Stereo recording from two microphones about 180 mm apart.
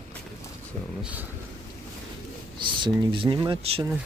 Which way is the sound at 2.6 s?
25° right (ahead or behind).